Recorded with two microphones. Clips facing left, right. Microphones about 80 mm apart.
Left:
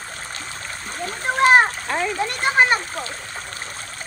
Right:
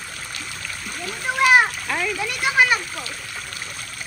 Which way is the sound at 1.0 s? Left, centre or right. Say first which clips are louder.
Left 2 dB; left.